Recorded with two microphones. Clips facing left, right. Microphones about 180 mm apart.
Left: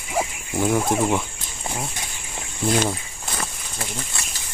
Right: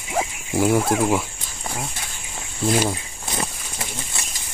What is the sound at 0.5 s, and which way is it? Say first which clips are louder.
Speech: right 2 dB; 5° right (ahead or behind).